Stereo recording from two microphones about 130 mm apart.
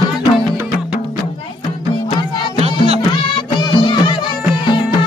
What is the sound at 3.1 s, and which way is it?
Music, 35° left (ahead or behind).